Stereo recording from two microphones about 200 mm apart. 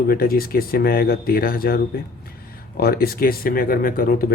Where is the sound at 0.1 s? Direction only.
45° left (ahead or behind).